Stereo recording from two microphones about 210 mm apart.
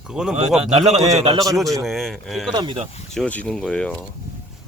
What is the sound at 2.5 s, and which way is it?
Speech, 20° right (ahead or behind).